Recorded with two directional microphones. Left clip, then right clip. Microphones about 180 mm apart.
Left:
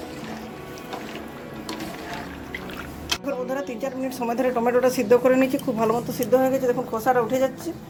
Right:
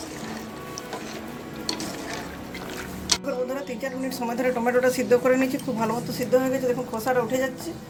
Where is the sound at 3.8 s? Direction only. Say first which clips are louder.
Left 2 dB; 40° left (ahead or behind).